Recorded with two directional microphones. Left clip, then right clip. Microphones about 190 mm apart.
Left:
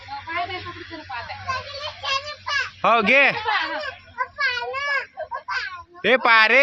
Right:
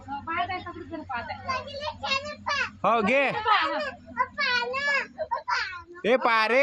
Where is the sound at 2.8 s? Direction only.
Centre (ahead or behind).